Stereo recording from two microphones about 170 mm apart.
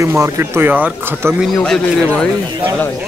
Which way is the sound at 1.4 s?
Centre (ahead or behind).